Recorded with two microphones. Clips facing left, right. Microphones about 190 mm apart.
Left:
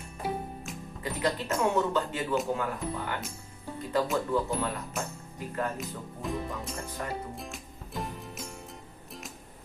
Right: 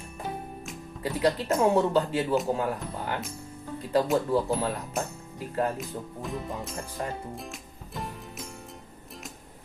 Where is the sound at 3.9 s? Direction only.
35° right (ahead or behind).